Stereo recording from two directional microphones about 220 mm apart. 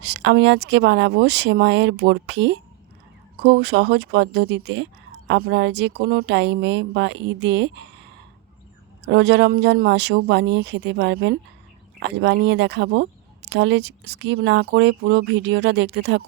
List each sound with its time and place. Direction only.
0.0 s speech: 50° right (ahead or behind)
9.0 s speech: 50° right (ahead or behind)